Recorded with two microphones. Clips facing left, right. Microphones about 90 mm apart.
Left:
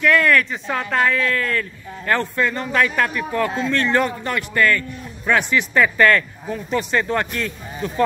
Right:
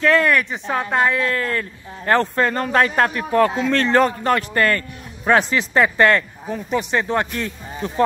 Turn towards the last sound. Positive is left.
turn(degrees=-25)  # may be behind; listen again after turning